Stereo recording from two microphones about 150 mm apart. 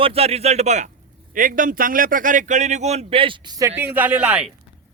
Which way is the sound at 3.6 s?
15° right (ahead or behind).